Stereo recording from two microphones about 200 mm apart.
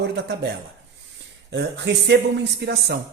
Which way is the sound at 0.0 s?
55° right (ahead or behind).